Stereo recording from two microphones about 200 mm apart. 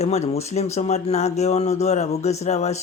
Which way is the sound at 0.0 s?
30° left (ahead or behind).